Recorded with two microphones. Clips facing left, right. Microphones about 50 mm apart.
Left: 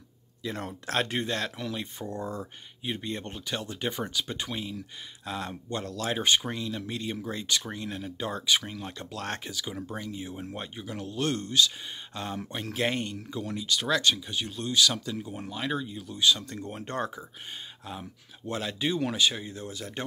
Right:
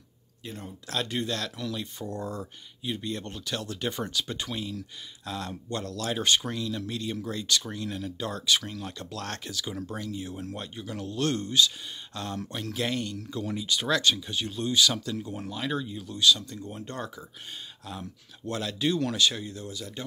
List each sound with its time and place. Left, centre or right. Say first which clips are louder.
0.5 s speech: left 5 dB; left
0.8 s speech: left 1 dB; left; by 11.7 s centre
12.1 s speech: even; left
13.3 s speech: right 2 dB; centre
13.6 s speech: left 1 dB; centre
13.8 s speech: right 1 dB; centre
15.0 s speech: right 1 dB; centre
16.2 s speech: right 2 dB; left
16.4 s speech: left 1 dB; left
18.5 s speech: right 2 dB; centre; by 20.1 s left